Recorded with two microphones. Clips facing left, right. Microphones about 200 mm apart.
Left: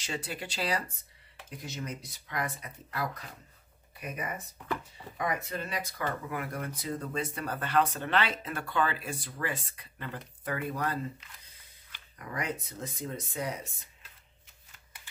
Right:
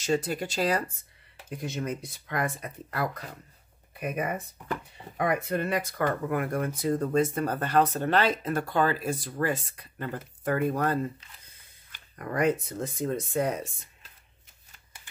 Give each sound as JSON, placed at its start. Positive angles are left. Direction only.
{"t": 0.0, "sound": "speech", "side_deg": -45}